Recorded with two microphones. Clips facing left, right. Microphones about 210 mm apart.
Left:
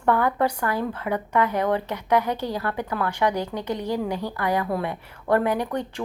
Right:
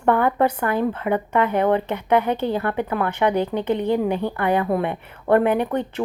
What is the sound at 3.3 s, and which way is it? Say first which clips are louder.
Speech: right 6 dB; 60° right (ahead or behind).